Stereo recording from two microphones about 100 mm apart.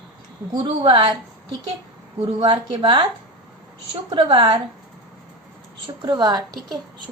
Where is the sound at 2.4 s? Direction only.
60° right (ahead or behind).